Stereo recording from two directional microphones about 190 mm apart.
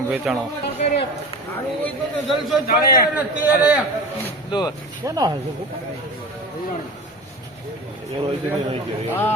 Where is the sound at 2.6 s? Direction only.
55° left (ahead or behind).